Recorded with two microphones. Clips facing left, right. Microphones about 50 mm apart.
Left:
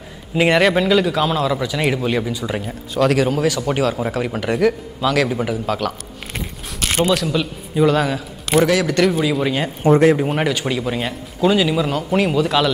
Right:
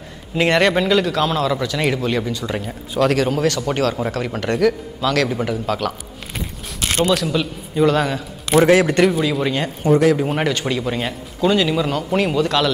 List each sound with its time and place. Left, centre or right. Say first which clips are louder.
0.3 s a man's voice: left 1 dB; centre
7.1 s speech: even; centre
8.5 s a man's voice: right 3 dB; right
9.0 s speech: even; centre
9.8 s speech: left 2 dB; left
10.1 s speech: left 1 dB; centre